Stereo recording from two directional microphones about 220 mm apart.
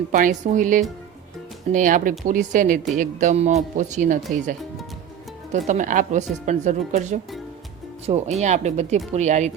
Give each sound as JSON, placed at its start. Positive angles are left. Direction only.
{"t": 0.1, "sound": "speech", "side_deg": -35}
{"t": 5.5, "sound": "speech", "side_deg": -35}